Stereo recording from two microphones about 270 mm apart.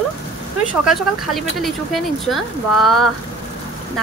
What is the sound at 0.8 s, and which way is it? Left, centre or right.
Speech, centre.